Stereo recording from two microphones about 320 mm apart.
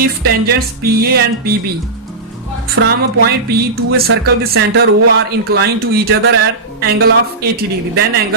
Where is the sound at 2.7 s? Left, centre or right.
Right.